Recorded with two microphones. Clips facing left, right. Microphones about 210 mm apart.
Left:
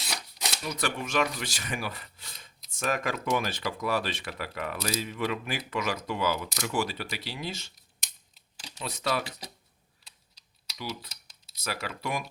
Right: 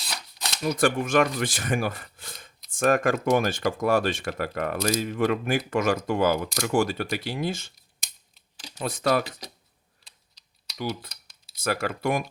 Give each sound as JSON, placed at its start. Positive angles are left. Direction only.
{"t": 0.6, "sound": "speech", "side_deg": -50}
{"t": 8.8, "sound": "speech", "side_deg": -50}
{"t": 10.8, "sound": "speech", "side_deg": -50}